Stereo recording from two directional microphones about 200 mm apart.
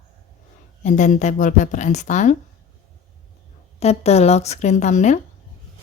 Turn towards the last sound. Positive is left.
turn(degrees=35)  # may be behind; listen again after turning